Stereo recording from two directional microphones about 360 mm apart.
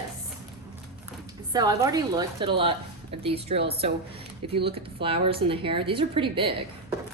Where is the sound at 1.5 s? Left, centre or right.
Centre.